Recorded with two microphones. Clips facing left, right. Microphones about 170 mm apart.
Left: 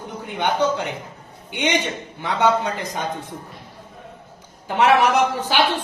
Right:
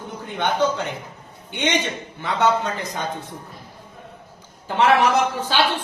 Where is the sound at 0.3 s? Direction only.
15° left (ahead or behind).